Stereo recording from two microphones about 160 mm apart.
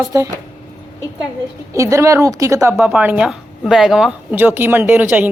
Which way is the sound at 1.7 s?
20° right (ahead or behind).